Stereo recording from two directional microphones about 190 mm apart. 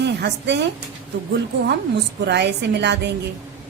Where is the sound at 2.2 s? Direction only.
65° right (ahead or behind).